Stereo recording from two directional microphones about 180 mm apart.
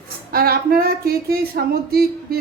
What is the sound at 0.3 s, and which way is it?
Speech, 55° right (ahead or behind).